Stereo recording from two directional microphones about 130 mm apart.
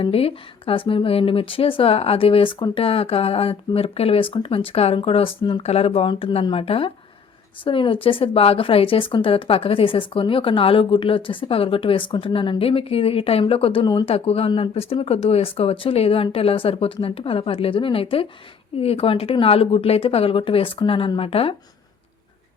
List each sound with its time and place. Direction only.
0.0 s speech: 50° left (ahead or behind)